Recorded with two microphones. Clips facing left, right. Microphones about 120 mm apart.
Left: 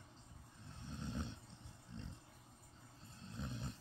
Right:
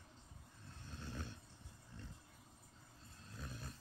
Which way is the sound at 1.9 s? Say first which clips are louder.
Left 4 dB; 20° left (ahead or behind).